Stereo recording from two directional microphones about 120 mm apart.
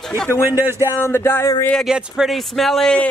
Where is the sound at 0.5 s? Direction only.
20° right (ahead or behind).